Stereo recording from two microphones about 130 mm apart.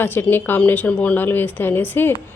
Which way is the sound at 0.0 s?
15° left (ahead or behind).